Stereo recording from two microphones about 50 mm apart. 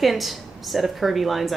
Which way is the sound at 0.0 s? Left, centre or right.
Centre.